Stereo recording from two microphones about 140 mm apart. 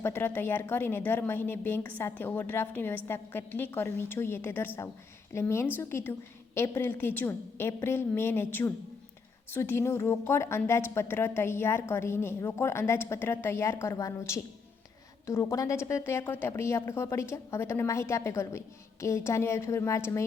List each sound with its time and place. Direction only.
0.0 s a woman's voice: 15° left (ahead or behind)